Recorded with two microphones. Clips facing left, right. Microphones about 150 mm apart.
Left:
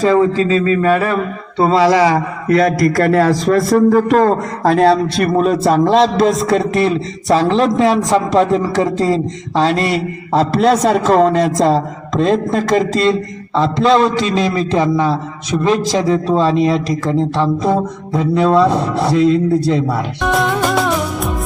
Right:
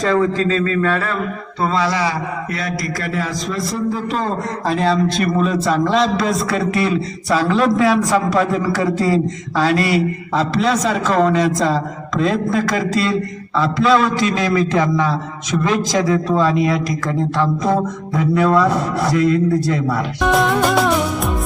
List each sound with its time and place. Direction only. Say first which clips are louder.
0.3 s a sound: left 4 dB; 10° left (ahead or behind)
1.5 s a man's voice: left 8 dB; 30° left (ahead or behind)
5.8 s speech: left 6 dB; 35° left (ahead or behind)
9.6 s music: left 2 dB; 30° left (ahead or behind)
10.6 s speech: left 6 dB; 45° left (ahead or behind)
14.7 s a sound: left 3 dB; 15° left (ahead or behind)
16.0 s music: left 4 dB; 25° left (ahead or behind)
20.2 s music: right 1 dB; centre (ahead or behind)